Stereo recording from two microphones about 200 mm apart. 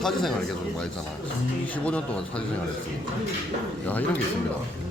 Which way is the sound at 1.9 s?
5° left (ahead or behind).